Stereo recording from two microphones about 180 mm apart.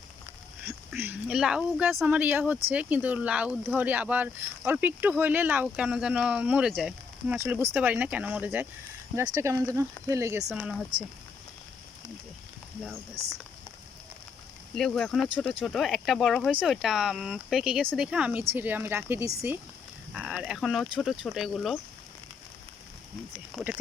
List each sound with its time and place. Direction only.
0.9 s speech: 5° right (ahead or behind)
10.5 s speech: 5° right (ahead or behind)
14.8 s speech: 5° left (ahead or behind); by 19.5 s 15° right (ahead or behind)
20.1 s speech: 5° right (ahead or behind)
23.5 s speech: 5° left (ahead or behind)